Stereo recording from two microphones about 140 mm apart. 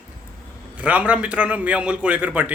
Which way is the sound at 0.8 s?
10° right (ahead or behind).